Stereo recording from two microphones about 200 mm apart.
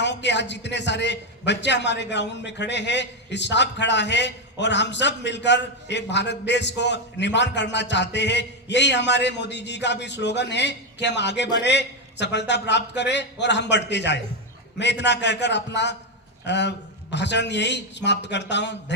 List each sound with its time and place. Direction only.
0.0 s a man's voice: 60° left (ahead or behind)